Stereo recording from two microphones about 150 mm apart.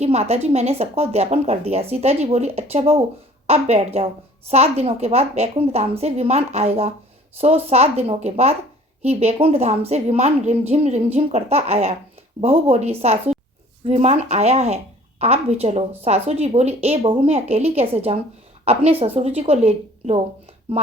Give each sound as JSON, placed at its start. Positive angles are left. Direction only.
{"t": 0.0, "sound": "speech", "side_deg": -45}